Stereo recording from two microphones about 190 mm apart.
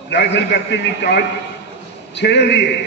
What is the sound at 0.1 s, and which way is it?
A man's voice, 65° left (ahead or behind).